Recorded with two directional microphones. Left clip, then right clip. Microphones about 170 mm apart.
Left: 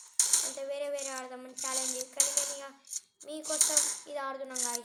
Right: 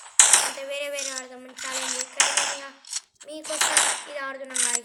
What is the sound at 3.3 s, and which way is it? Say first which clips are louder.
Speech: right 2 dB; 20° left (ahead or behind).